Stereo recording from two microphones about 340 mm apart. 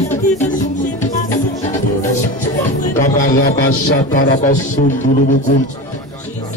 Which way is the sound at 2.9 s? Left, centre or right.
Left.